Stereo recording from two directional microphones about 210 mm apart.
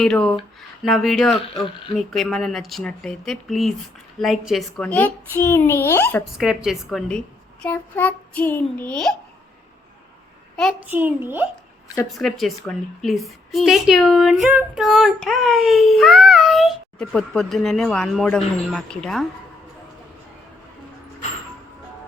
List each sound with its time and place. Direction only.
0.0 s a woman's voice: 5° left (ahead or behind)
6.3 s a woman's voice: centre (ahead or behind)
10.6 s a child's voice: 5° right (ahead or behind)